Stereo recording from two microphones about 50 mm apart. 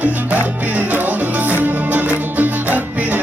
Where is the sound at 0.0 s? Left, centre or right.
Right.